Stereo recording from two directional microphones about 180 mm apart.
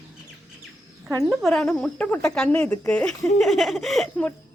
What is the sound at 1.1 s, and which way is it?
Speech, 20° right (ahead or behind).